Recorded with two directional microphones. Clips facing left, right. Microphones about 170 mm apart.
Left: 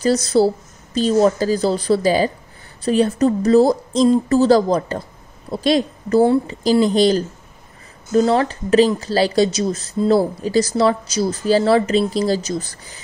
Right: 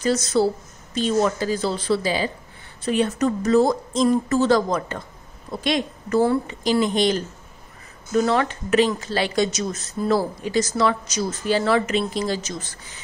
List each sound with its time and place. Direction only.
0.0 s speech: 35° left (ahead or behind)